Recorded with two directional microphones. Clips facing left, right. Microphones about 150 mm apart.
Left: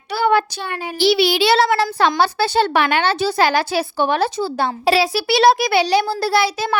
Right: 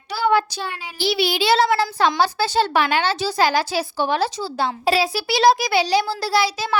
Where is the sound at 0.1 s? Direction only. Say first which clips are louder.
Left 2 dB; 60° left (ahead or behind).